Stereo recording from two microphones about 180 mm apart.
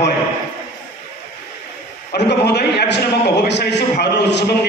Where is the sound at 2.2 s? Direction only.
70° left (ahead or behind).